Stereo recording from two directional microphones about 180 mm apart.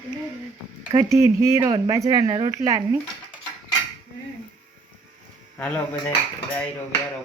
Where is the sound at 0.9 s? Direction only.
15° right (ahead or behind).